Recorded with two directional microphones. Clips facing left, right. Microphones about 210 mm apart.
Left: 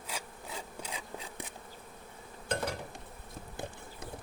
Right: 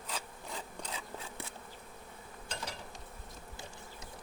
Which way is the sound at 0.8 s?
15° left (ahead or behind).